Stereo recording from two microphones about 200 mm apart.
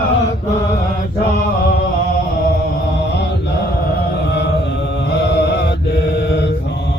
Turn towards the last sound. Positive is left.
turn(degrees=55)  # may be behind; listen again after turning